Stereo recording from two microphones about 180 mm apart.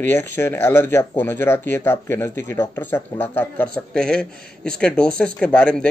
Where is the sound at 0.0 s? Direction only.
10° left (ahead or behind).